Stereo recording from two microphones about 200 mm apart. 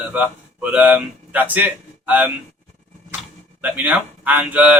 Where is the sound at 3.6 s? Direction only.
10° right (ahead or behind).